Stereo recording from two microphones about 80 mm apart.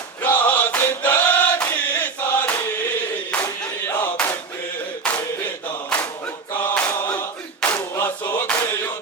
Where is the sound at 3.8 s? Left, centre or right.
Left.